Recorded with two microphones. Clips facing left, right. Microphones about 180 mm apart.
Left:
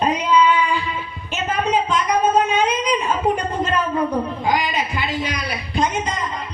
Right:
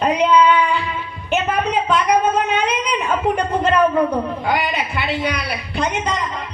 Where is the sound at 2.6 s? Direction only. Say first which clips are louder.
Left 1 dB; 65° right (ahead or behind).